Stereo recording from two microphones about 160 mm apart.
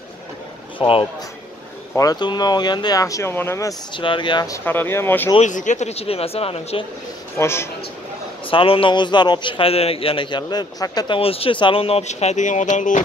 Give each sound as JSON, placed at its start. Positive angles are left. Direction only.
{"t": 0.7, "sound": "a man's voice", "side_deg": 35}
{"t": 3.9, "sound": "speech", "side_deg": 30}
{"t": 4.6, "sound": "speech", "side_deg": 15}
{"t": 5.4, "sound": "a man's voice", "side_deg": 50}
{"t": 7.3, "sound": "speech", "side_deg": 15}
{"t": 8.5, "sound": "a man's voice", "side_deg": 35}